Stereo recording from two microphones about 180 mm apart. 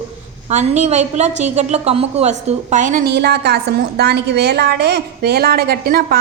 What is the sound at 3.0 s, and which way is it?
A woman's voice, 65° right (ahead or behind).